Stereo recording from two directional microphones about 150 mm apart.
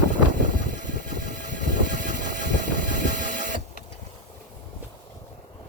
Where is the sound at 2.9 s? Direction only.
60° right (ahead or behind).